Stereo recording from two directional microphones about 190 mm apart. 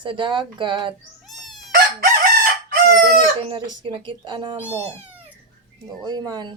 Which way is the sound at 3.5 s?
25° right (ahead or behind).